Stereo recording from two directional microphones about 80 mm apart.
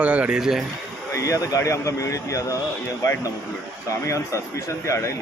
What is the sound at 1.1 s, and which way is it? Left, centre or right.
A man's voice, left.